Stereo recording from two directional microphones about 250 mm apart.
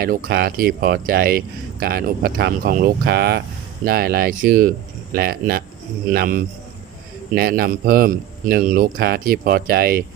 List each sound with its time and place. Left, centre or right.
0.0 s speech: right